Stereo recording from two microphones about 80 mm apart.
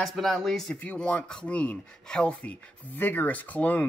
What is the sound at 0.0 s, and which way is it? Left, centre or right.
Speech, centre.